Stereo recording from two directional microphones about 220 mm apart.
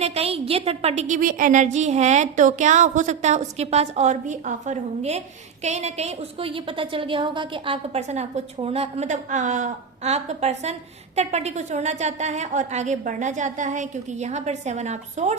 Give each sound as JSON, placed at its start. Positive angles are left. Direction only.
{"t": 0.0, "sound": "a woman's voice", "side_deg": -25}